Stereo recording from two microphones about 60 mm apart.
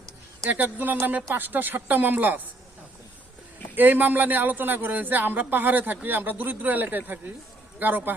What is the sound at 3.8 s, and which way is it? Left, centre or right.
Speech, right.